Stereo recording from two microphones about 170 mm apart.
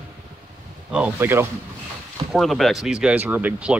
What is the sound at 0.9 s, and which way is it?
Speech, 10° right (ahead or behind).